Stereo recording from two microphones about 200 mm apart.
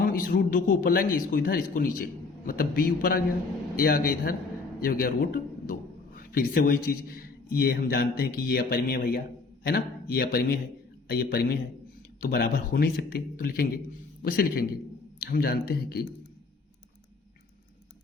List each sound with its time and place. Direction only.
0.0 s a man's voice: 45° left (ahead or behind)